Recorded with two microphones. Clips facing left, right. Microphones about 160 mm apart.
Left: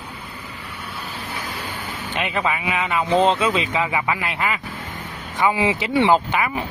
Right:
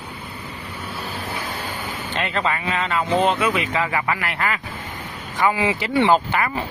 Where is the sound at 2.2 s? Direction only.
15° left (ahead or behind).